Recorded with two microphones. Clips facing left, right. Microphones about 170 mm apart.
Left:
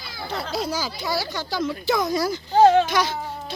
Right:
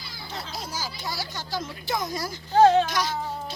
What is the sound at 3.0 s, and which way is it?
Speech, 60° left (ahead or behind).